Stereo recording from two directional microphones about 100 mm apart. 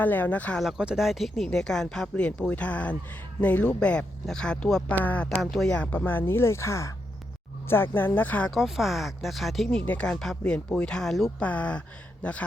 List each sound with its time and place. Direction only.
0.0 s speech: 15° left (ahead or behind)
0.6 s speech: 5° right (ahead or behind); by 5.3 s 15° left (ahead or behind)
5.4 s speech: centre (ahead or behind)
5.7 s speech: 15° left (ahead or behind)
8.4 s speech: centre (ahead or behind)
9.6 s speech: 15° left (ahead or behind)